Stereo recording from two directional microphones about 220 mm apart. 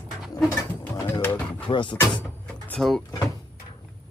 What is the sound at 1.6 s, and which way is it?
Speech, 20° left (ahead or behind).